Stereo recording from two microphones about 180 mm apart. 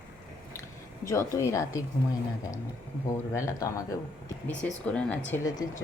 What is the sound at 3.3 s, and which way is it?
Speech, 15° left (ahead or behind).